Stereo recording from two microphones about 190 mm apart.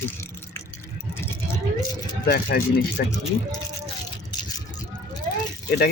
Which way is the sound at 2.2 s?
55° left (ahead or behind).